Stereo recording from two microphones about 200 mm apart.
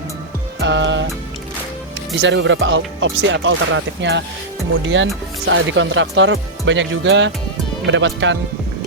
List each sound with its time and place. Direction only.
0.6 s music: 65° right (ahead or behind)
2.2 s speech: 65° right (ahead or behind)